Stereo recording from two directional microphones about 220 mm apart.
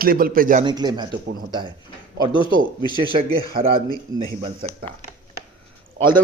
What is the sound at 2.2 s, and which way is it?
Speech, 20° right (ahead or behind).